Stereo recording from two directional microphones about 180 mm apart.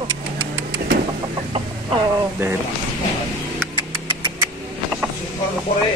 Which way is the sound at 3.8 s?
25° right (ahead or behind).